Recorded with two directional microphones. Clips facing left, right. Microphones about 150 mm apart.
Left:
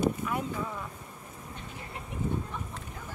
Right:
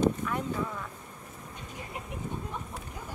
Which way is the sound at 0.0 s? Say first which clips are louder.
Right 1 dB; 10° left (ahead or behind).